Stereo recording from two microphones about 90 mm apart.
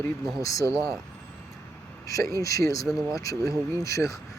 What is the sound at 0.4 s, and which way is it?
Speech, 40° left (ahead or behind).